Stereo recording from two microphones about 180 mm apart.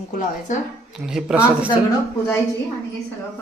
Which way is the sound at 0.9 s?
Centre (ahead or behind).